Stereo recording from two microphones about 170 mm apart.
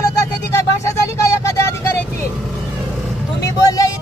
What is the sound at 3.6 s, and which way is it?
Vehicle, 20° left (ahead or behind).